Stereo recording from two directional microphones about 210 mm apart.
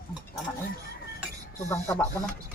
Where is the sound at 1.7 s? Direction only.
10° left (ahead or behind).